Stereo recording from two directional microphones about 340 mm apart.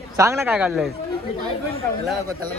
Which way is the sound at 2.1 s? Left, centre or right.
Centre.